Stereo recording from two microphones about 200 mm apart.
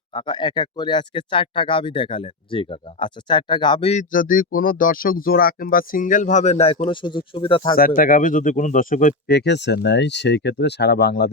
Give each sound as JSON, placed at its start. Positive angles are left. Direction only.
{"t": 0.1, "sound": "speech", "side_deg": 25}
{"t": 4.1, "sound": "speech", "side_deg": 45}
{"t": 7.8, "sound": "speech", "side_deg": 45}